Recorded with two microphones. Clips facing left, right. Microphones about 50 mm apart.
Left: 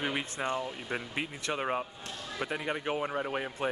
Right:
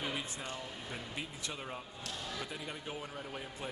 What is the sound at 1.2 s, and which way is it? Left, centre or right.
Speech, left.